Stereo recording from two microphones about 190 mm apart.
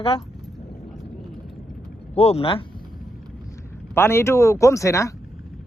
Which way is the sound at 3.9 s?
15° left (ahead or behind).